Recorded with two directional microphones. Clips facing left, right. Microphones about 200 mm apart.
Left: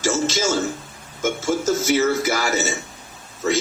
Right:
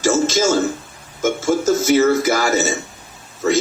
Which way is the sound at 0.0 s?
50° right (ahead or behind).